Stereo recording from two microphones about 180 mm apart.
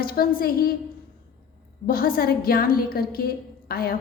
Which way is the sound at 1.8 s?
55° left (ahead or behind).